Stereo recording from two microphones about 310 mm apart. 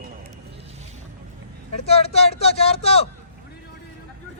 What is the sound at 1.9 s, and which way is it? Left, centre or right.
Speech, centre.